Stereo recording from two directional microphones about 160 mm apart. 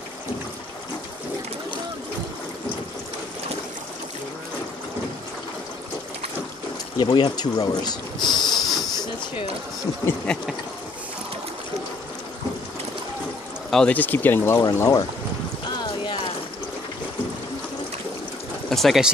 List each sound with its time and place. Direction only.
7.0 s speech: 25° left (ahead or behind)
8.6 s hiss: centre (ahead or behind)
10.2 s speech: 5° left (ahead or behind)
13.7 s speech: 5° left (ahead or behind)
15.8 s clip-clop: 30° left (ahead or behind)
18.7 s speech: centre (ahead or behind)